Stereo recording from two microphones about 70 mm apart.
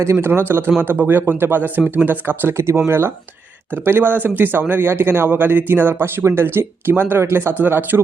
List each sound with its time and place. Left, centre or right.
0.0 s speech: right
7.6 s speech: right